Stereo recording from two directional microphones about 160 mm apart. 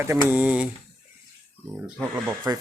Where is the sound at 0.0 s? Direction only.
15° right (ahead or behind).